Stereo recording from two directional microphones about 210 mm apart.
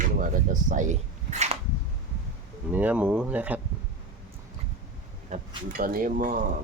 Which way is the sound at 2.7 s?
5° right (ahead or behind).